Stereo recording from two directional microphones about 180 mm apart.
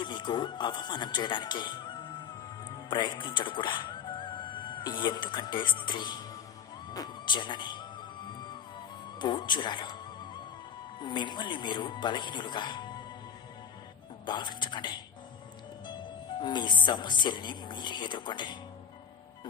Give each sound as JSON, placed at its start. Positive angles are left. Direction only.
{"t": 0.0, "sound": "speech", "side_deg": 25}
{"t": 9.2, "sound": "speech", "side_deg": 25}
{"t": 11.0, "sound": "speech", "side_deg": 25}
{"t": 14.2, "sound": "speech", "side_deg": 25}